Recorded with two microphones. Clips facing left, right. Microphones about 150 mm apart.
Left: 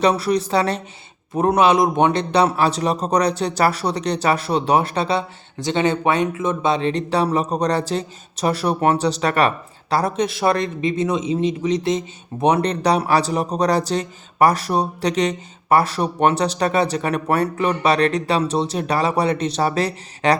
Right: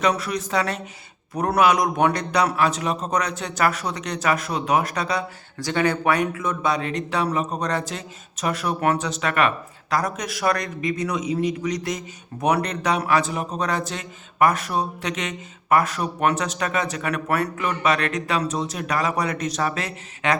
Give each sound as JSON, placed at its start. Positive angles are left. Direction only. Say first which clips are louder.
{"t": 0.0, "sound": "a man's voice", "louder": "left 5 dB", "side_deg": 35}